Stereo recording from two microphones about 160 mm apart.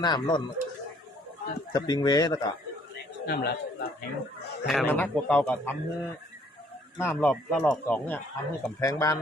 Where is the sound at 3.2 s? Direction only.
80° left.